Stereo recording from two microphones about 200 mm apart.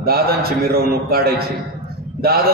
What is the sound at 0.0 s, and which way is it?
A man's voice, 50° right (ahead or behind).